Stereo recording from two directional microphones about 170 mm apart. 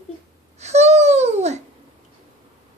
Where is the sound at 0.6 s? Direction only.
40° right (ahead or behind).